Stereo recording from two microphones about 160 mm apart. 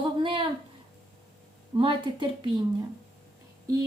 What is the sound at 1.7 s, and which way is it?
Speech, 30° right (ahead or behind).